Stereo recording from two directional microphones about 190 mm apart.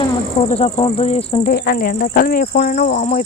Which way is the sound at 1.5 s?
50° left (ahead or behind).